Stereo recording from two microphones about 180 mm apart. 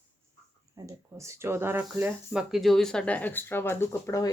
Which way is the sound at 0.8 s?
20° right (ahead or behind).